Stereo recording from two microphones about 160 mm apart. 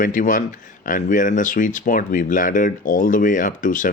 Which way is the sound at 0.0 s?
55° left (ahead or behind).